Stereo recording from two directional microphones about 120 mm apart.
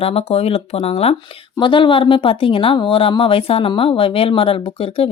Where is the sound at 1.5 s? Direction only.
40° left (ahead or behind).